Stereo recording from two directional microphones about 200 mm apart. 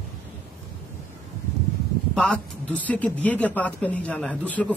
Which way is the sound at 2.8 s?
5° left (ahead or behind).